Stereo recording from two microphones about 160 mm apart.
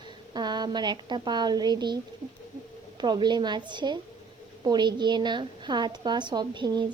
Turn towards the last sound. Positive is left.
turn(degrees=-30)  # may be behind; listen again after turning